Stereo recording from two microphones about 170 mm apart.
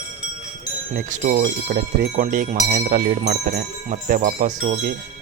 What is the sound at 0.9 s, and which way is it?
Speech, 50° right (ahead or behind).